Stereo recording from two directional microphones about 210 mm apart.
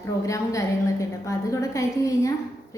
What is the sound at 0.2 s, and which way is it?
A woman's voice, 15° left (ahead or behind).